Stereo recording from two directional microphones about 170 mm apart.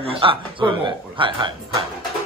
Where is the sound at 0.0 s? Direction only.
30° right (ahead or behind).